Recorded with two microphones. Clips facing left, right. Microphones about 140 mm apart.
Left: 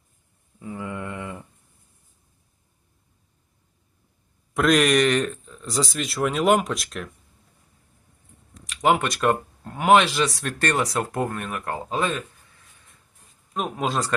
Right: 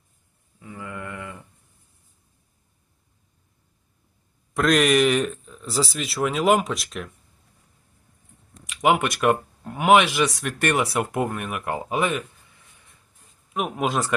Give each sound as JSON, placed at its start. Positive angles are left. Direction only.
{"t": 0.6, "sound": "a sound", "side_deg": 30}
{"t": 4.5, "sound": "speech", "side_deg": 0}
{"t": 8.8, "sound": "speech", "side_deg": -15}
{"t": 10.2, "sound": "speech", "side_deg": 0}
{"t": 10.4, "sound": "speech", "side_deg": -15}